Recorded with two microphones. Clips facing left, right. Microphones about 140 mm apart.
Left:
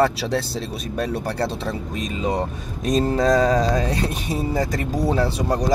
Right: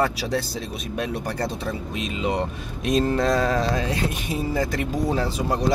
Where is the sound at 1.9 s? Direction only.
40° left (ahead or behind).